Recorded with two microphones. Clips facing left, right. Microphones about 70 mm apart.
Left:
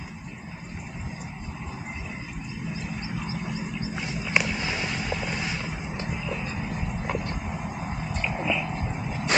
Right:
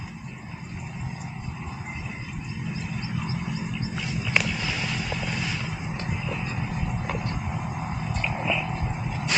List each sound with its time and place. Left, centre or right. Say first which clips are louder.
3.9 s vehicle: even; left
6.2 s vehicle: even; centre
7.0 s vehicle: left 1 dB; centre
7.5 s a sound: right 1 dB; centre